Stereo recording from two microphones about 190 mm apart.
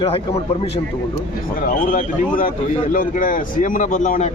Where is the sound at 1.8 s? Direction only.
45° left (ahead or behind).